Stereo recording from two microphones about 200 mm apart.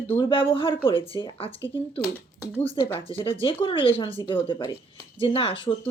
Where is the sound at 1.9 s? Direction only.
10° left (ahead or behind).